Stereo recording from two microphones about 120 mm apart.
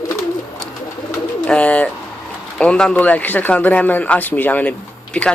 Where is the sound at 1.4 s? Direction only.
10° left (ahead or behind).